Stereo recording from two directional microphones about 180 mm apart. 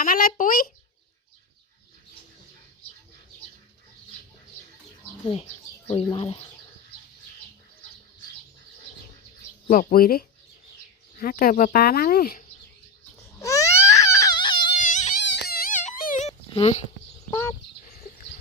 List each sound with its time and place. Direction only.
0.0 s speech: 50° left (ahead or behind)
5.2 s speech: 35° left (ahead or behind)
9.6 s speech: 50° left (ahead or behind)
13.4 s baby cry: 20° left (ahead or behind)
14.8 s a sound: 45° left (ahead or behind)
15.3 s music: 65° left (ahead or behind); by 16.3 s 45° left (ahead or behind)
16.5 s speech: 35° left (ahead or behind)